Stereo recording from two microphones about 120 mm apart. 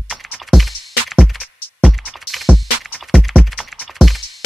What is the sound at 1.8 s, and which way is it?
Music, centre (ahead or behind).